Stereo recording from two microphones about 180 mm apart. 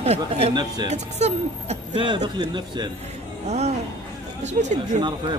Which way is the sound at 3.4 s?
35° right (ahead or behind).